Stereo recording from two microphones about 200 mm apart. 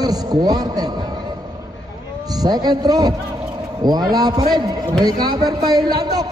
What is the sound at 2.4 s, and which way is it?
A man's voice, 20° right (ahead or behind).